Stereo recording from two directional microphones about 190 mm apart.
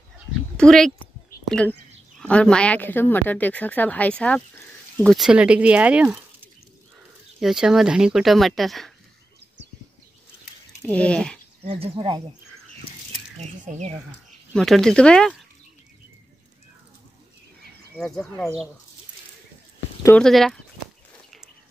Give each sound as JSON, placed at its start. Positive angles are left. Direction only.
{"t": 0.6, "sound": "a woman's voice", "side_deg": 5}
{"t": 10.9, "sound": "a woman's voice", "side_deg": 5}
{"t": 11.6, "sound": "speech", "side_deg": -30}
{"t": 13.4, "sound": "speech", "side_deg": -40}
{"t": 14.5, "sound": "speech", "side_deg": 0}
{"t": 17.9, "sound": "speech", "side_deg": 0}
{"t": 20.2, "sound": "speech", "side_deg": 0}